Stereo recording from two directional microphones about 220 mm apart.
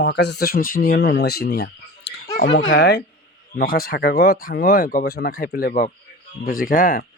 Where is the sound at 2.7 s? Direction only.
50° left (ahead or behind).